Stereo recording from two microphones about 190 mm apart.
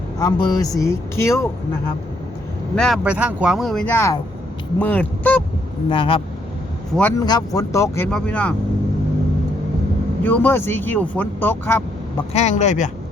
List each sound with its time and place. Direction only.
0.2 s speech: 20° left (ahead or behind)
2.7 s speech: centre (ahead or behind)
5.9 s speech: 25° left (ahead or behind); by 8.5 s 5° left (ahead or behind)
10.2 s speech: 10° left (ahead or behind)
12.3 s speech: 35° left (ahead or behind)